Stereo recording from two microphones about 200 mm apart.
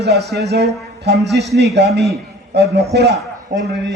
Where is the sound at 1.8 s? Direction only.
55° right (ahead or behind).